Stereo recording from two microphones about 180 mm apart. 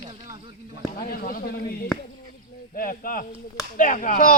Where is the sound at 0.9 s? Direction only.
55° left (ahead or behind).